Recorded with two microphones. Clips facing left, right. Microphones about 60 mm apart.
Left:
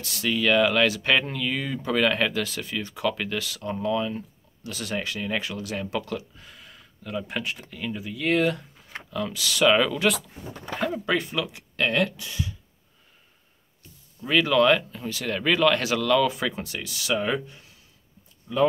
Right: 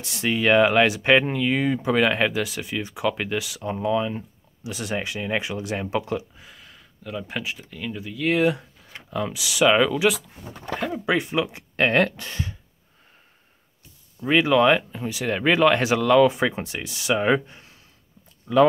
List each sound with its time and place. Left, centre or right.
0.0 s speech: right
6.3 s speech: centre
11.1 s speech: right
14.2 s speech: right
18.5 s speech: right